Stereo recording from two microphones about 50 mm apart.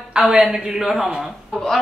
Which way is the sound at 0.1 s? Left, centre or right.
Centre.